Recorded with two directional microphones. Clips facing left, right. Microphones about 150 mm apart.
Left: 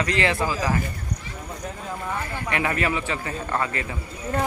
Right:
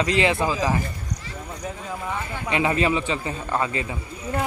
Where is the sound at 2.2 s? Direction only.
20° right (ahead or behind).